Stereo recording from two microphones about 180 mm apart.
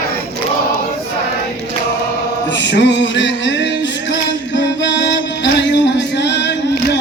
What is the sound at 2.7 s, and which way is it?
Music, 80° left.